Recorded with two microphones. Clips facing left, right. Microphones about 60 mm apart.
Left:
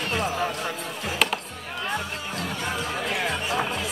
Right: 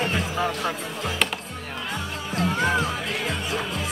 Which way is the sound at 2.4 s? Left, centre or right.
Right.